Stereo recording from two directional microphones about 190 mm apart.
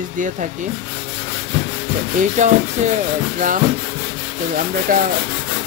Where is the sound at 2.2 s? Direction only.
40° right (ahead or behind).